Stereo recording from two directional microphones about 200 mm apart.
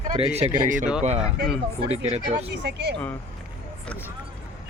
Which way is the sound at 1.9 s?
30° right (ahead or behind).